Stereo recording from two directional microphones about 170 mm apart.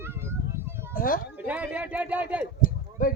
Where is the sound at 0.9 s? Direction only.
55° left (ahead or behind).